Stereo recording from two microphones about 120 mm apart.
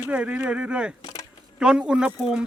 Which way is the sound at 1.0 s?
30° left (ahead or behind).